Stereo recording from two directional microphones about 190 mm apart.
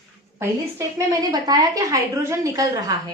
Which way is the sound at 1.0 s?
20° right (ahead or behind).